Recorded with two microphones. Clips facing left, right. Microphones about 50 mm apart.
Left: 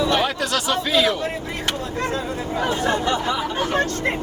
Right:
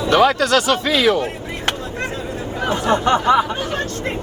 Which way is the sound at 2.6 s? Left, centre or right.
Right.